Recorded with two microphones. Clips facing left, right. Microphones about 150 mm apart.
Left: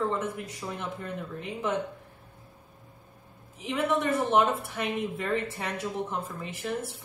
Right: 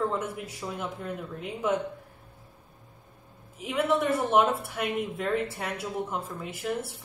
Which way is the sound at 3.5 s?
Centre (ahead or behind).